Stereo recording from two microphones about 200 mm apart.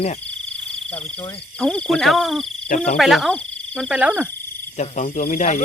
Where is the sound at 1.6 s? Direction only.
5° left (ahead or behind).